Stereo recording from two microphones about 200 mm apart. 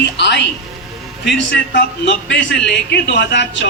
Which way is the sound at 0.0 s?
60° left (ahead or behind).